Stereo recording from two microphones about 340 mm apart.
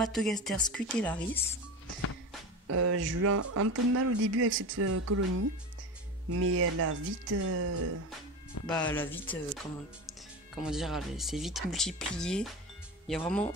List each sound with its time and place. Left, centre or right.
0.0 s a woman's voice: centre
2.7 s speech: right
8.6 s speech: left
8.9 s a woman's voice: centre